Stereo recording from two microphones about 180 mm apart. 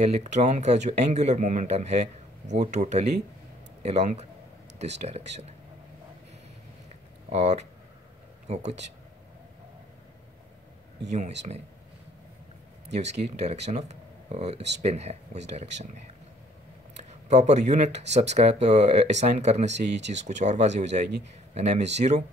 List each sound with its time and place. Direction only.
0.0 s speech: 40° right (ahead or behind)
7.2 s speech: 35° right (ahead or behind)
11.1 s speech: 40° right (ahead or behind)
12.9 s speech: 40° right (ahead or behind)
17.1 s speech: 40° right (ahead or behind)